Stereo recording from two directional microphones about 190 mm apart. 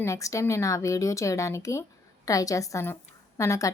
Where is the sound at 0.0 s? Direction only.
15° left (ahead or behind).